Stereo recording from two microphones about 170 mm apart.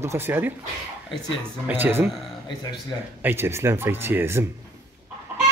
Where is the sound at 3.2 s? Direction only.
15° right (ahead or behind).